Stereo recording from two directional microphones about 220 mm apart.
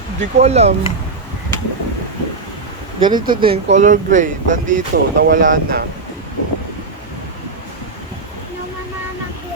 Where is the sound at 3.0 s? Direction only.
20° right (ahead or behind).